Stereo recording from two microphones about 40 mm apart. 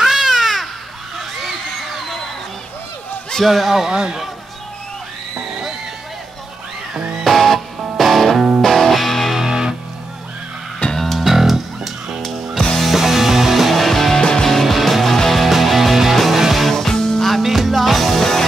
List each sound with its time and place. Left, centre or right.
0.0 s a sound: centre
3.4 s speech: centre
7.2 s music: centre
9.4 s music: centre
11.0 s music: centre
12.2 s music: centre
12.9 s music: centre
16.6 s music: centre
17.4 s music: centre